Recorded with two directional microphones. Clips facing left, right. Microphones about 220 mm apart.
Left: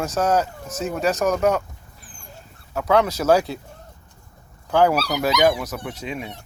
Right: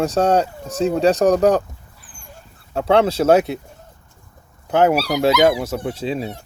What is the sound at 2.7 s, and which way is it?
Speech, 30° right (ahead or behind).